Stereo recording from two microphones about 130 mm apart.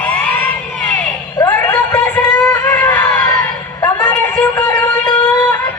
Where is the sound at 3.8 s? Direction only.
30° left (ahead or behind).